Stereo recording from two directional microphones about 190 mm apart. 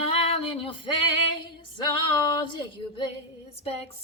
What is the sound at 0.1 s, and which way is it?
Female singing, 30° left (ahead or behind).